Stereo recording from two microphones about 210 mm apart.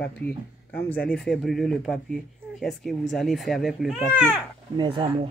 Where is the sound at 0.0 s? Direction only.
5° left (ahead or behind).